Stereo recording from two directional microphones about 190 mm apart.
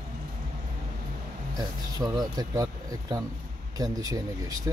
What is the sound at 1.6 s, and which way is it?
Speech, 20° right (ahead or behind).